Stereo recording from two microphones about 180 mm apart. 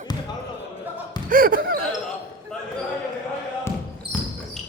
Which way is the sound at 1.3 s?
50° right (ahead or behind).